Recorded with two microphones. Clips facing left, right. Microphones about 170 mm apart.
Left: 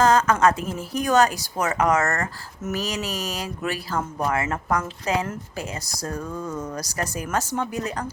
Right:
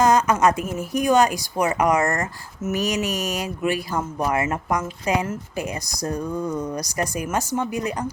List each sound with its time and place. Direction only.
0.0 s speech: 15° right (ahead or behind)
2.8 s a sound: 30° left (ahead or behind)
3.3 s speech: 10° right (ahead or behind)